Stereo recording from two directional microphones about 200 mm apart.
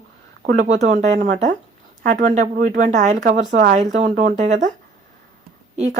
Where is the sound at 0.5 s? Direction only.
35° right (ahead or behind).